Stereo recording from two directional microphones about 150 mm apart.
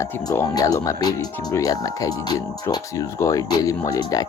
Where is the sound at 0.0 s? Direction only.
20° left (ahead or behind).